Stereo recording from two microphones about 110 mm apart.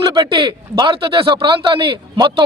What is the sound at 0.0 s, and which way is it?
Speech, 50° right (ahead or behind).